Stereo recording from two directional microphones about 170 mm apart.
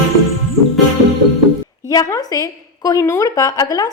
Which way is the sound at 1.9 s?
20° left (ahead or behind).